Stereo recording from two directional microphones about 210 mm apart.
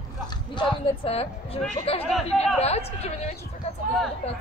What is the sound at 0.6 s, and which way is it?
Speech, 25° left (ahead or behind).